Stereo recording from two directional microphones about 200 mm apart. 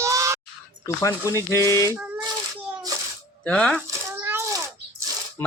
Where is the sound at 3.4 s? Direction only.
5° left (ahead or behind).